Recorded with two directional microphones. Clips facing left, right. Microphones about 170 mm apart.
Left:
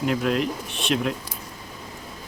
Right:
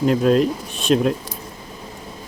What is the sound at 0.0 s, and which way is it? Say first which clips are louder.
Speech: right 7 dB; 35° right (ahead or behind).